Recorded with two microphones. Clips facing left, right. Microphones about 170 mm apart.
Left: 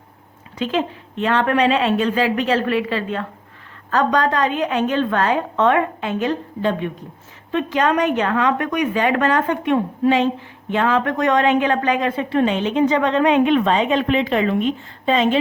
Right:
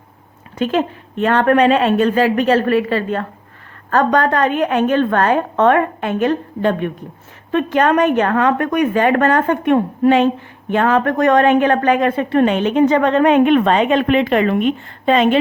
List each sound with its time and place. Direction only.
0.6 s a woman's voice: 50° right (ahead or behind)